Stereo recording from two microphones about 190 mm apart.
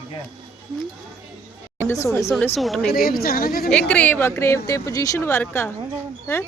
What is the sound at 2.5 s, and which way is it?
Speech, centre (ahead or behind).